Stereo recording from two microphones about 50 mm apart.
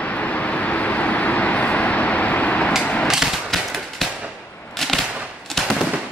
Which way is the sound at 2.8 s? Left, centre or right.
Left.